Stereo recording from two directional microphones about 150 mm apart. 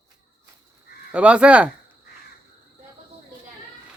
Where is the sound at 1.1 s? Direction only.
10° right (ahead or behind).